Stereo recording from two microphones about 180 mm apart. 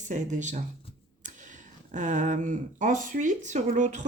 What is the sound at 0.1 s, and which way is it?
Speech, 40° right (ahead or behind).